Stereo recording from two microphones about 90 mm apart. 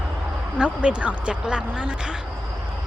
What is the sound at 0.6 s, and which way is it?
Speech, 15° right (ahead or behind).